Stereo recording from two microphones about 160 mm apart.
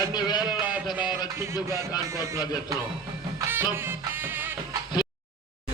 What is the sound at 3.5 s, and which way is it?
Music, 15° right (ahead or behind).